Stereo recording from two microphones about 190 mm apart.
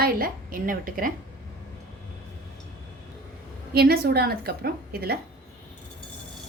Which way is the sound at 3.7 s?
55° right (ahead or behind).